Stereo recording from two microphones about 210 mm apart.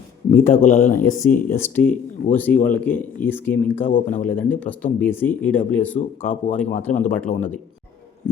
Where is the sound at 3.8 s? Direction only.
40° left (ahead or behind).